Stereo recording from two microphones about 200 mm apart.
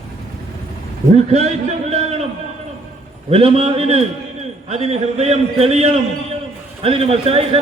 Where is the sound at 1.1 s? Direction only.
35° right (ahead or behind).